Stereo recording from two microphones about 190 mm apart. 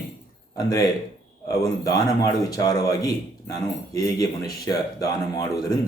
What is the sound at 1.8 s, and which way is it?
A man's voice, 20° left (ahead or behind).